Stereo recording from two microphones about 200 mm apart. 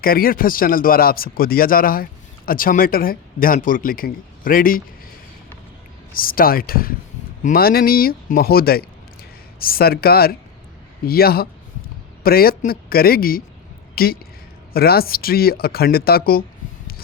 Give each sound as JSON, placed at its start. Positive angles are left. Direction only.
{"t": 0.0, "sound": "speech", "side_deg": 45}
{"t": 6.1, "sound": "a woman's voice", "side_deg": 45}